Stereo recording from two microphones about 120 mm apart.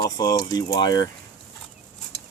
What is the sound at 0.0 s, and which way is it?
Speech, 35° left (ahead or behind).